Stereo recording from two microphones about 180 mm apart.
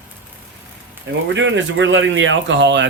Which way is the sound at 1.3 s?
90° right.